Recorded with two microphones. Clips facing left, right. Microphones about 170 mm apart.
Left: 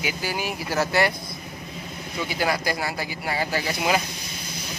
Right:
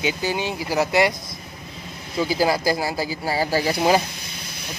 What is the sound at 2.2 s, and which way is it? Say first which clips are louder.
Speech: right 5 dB; 30° right (ahead or behind).